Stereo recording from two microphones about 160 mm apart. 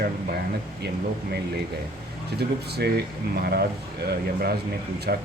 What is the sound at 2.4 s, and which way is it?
Speech, 90° right.